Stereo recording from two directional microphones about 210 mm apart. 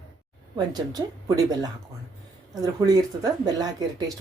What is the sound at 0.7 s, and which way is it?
Speech, 20° right (ahead or behind).